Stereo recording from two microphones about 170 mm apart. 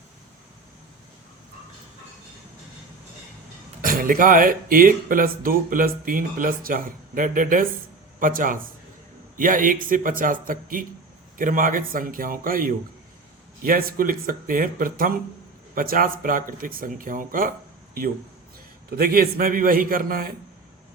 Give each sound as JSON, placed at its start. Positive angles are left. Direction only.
{"t": 3.8, "sound": "a man's voice", "side_deg": -55}
{"t": 18.9, "sound": "speech", "side_deg": -60}